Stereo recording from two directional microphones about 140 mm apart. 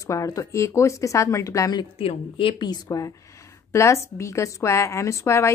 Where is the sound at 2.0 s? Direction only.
40° left (ahead or behind).